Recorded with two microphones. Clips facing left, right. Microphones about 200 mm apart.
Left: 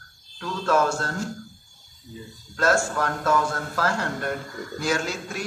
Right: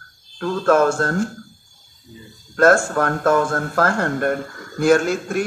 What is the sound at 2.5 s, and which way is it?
Speech, 55° right (ahead or behind).